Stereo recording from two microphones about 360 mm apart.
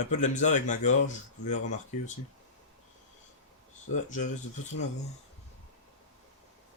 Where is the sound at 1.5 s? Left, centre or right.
Left.